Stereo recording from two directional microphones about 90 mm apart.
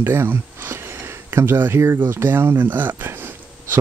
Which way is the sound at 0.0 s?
25° right (ahead or behind).